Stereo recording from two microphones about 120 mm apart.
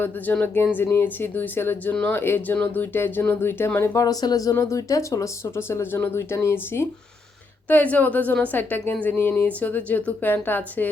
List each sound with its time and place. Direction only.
0.0 s speech: 15° left (ahead or behind)